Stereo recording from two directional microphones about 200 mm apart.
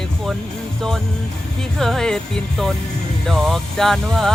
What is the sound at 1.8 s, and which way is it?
Speech, centre (ahead or behind).